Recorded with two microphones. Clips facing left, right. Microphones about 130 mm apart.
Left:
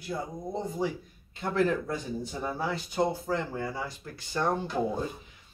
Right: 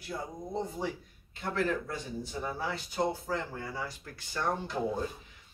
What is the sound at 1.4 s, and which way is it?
Speech, 20° left (ahead or behind).